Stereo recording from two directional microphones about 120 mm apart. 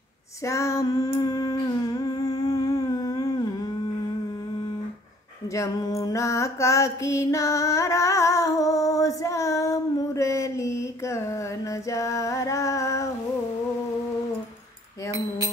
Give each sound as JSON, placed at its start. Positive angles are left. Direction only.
{"t": 0.5, "sound": "music", "side_deg": 25}
{"t": 5.5, "sound": "mantra", "side_deg": 25}